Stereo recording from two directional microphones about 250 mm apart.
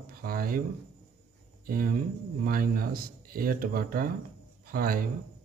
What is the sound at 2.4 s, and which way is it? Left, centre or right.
A man's voice, right.